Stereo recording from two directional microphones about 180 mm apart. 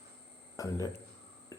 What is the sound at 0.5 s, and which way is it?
Speech, 20° left (ahead or behind).